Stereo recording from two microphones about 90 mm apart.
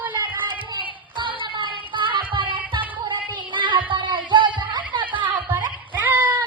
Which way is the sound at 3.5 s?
65° right (ahead or behind).